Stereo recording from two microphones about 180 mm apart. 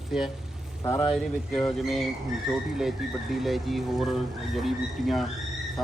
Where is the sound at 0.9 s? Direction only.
15° left (ahead or behind).